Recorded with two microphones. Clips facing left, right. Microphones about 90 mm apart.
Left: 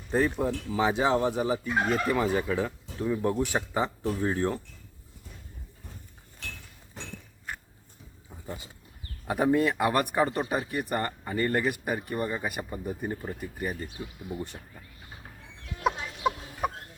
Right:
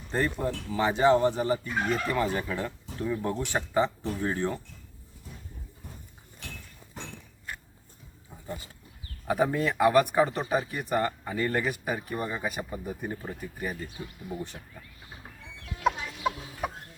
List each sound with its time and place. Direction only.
0.1 s speech: 5° left (ahead or behind)
8.4 s speech: 20° left (ahead or behind)
9.2 s speech: centre (ahead or behind)
16.2 s chicken: 10° left (ahead or behind)